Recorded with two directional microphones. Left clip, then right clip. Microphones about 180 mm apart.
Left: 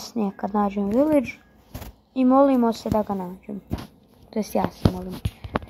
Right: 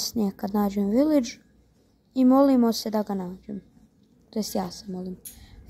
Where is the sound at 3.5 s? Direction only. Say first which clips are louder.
Left 7 dB; 10° right (ahead or behind).